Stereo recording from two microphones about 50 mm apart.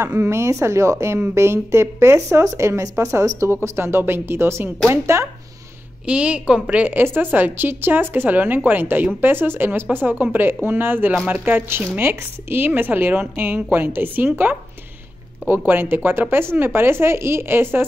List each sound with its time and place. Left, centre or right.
0.0 s speech: right
3.6 s speech: right
6.0 s a woman's voice: right
6.9 s speech: right
9.9 s speech: right